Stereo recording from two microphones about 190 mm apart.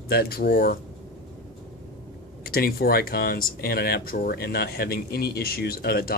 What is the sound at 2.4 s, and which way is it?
Speech, 50° left (ahead or behind).